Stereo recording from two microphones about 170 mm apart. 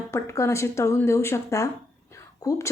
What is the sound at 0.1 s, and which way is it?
A woman's voice, 15° left (ahead or behind).